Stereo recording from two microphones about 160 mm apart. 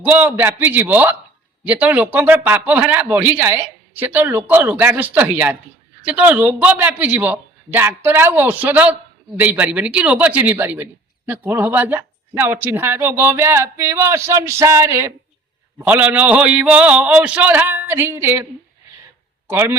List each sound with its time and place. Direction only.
0.0 s a man's voice: 10° right (ahead or behind)
19.5 s a man's voice: 15° right (ahead or behind)